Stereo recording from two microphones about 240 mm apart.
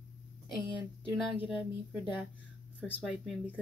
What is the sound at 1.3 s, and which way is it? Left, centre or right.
Speech, centre.